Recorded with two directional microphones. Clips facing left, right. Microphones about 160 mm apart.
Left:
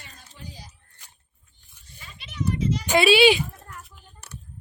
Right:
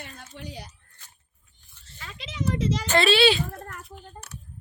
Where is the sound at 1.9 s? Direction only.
90° right.